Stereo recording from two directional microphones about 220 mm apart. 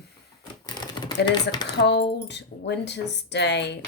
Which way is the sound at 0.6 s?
20° left (ahead or behind).